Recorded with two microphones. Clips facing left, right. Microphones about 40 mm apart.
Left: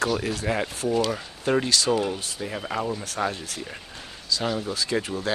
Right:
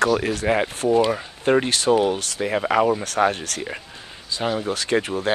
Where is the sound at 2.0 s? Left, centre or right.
Right.